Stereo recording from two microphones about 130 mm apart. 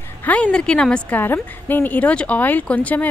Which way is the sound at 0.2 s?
10° left (ahead or behind).